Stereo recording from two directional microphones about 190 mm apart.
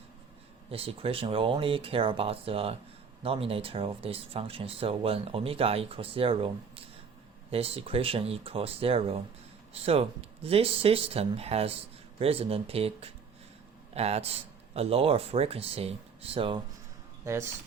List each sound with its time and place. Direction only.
0.7 s speech: 30° right (ahead or behind)